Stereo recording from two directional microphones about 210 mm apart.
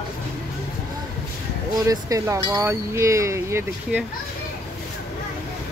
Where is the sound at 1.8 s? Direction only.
15° right (ahead or behind).